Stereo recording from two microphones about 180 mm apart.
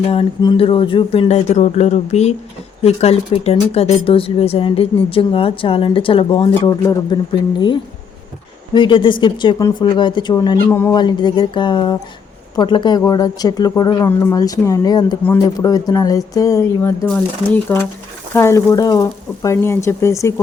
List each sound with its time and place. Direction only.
0.0 s speech: 30° left (ahead or behind)
8.7 s speech: 25° left (ahead or behind)